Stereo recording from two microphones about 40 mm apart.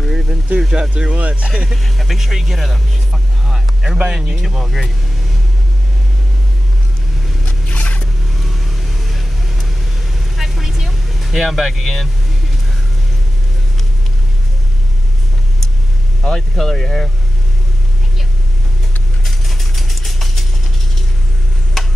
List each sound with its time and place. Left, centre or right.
0.1 s vehicle: centre
0.6 s speech: centre
1.8 s speech: centre
2.1 s a sound: centre
3.9 s speech: centre
4.4 s speech: centre
7.7 s zipper: left
8.3 s vehicle: centre
16.3 s speech: centre
19.2 s vehicle: centre
21.8 s tick-tock: centre